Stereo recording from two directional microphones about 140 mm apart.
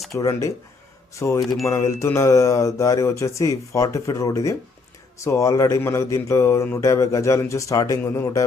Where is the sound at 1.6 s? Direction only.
20° left (ahead or behind).